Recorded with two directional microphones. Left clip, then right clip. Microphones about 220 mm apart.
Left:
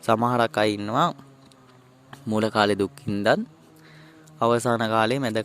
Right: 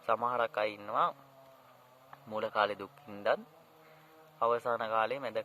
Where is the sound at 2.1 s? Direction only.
50° left (ahead or behind).